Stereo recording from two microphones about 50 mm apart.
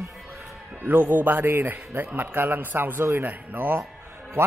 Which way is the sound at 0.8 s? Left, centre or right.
Right.